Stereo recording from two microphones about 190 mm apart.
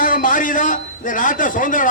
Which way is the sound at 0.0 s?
45° left (ahead or behind).